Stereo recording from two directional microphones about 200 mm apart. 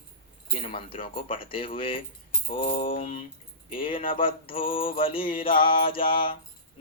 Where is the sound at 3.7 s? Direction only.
25° left (ahead or behind).